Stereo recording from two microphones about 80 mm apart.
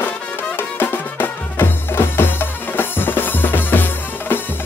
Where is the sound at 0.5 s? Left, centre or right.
Left.